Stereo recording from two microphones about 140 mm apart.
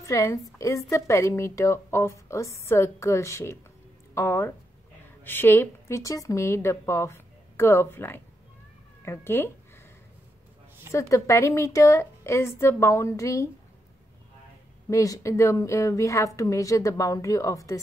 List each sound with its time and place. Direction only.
0.0 s a woman's voice: 20° left (ahead or behind)
10.9 s a woman's voice: 20° left (ahead or behind)
14.9 s a woman's voice: 20° left (ahead or behind)